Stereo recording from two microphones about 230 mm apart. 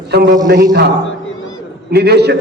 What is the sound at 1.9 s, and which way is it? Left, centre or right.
Speech, right.